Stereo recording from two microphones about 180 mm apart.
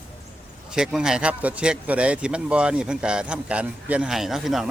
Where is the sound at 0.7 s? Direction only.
5° right (ahead or behind).